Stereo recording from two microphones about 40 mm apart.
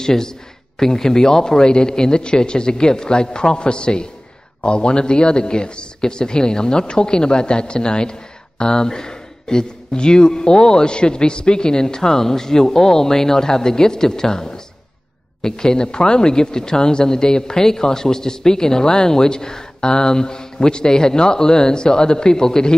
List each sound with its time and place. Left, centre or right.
0.0 s speech: centre